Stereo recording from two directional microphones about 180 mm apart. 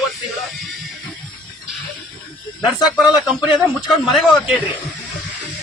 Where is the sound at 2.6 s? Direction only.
5° right (ahead or behind).